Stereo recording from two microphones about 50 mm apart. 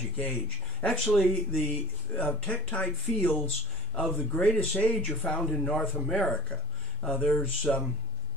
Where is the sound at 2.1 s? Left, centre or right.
Left.